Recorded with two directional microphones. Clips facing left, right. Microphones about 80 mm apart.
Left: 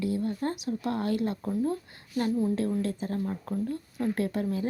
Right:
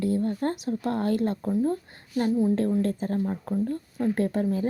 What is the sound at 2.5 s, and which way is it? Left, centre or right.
A woman's voice, right.